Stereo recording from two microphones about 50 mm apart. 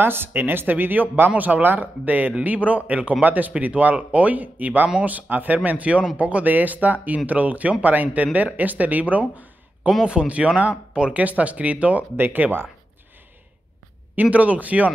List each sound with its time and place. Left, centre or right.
0.0 s speech: right
10.0 s speech: right
11.1 s speech: right
14.1 s speech: right